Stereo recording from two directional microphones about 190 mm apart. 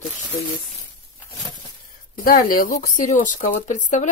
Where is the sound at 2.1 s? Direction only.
45° left (ahead or behind).